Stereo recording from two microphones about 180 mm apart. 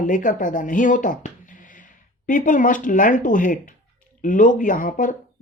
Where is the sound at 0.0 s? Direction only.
45° left (ahead or behind).